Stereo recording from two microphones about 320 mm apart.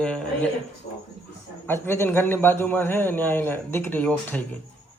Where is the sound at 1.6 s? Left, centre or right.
Centre.